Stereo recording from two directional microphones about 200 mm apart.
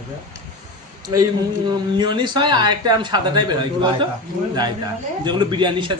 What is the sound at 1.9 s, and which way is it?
A man's voice, 20° right (ahead or behind).